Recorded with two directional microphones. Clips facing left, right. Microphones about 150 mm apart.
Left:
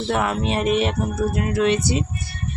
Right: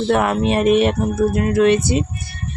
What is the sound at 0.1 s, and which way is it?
Speech, 55° right (ahead or behind).